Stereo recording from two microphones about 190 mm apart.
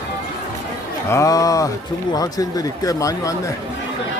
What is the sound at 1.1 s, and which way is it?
A man's voice, 15° left (ahead or behind).